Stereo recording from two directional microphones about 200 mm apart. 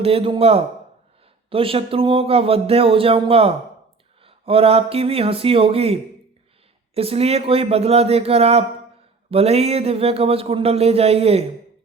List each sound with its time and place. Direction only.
0.0 s speech: 30° right (ahead or behind)